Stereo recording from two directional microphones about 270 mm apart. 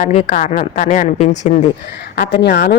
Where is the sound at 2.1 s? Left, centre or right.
Left.